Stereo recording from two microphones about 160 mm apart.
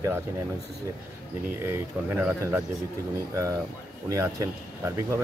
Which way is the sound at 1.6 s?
10° right (ahead or behind).